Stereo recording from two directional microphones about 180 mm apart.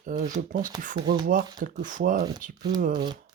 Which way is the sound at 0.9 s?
25° right (ahead or behind).